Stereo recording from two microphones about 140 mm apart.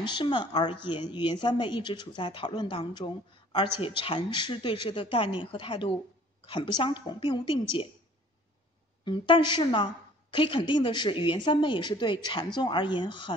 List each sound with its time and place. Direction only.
0.0 s a woman's voice: 35° left (ahead or behind)
9.0 s speech: 35° left (ahead or behind)